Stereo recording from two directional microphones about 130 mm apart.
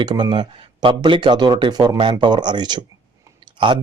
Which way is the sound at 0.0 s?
35° right (ahead or behind).